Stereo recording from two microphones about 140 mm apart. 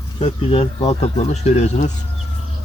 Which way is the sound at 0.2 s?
45° left (ahead or behind).